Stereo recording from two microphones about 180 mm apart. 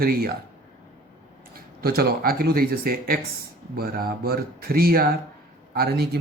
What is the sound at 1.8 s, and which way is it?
Speech, 60° right (ahead or behind).